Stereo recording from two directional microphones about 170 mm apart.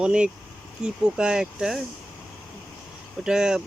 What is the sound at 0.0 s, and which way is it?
Speech, 5° right (ahead or behind).